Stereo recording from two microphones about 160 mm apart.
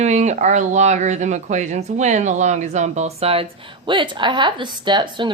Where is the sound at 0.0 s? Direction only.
45° right (ahead or behind).